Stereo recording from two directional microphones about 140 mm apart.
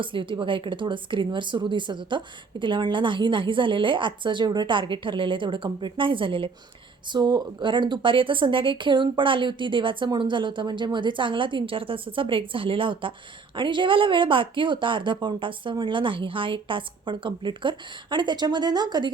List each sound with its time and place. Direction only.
0.0 s speech: 35° right (ahead or behind)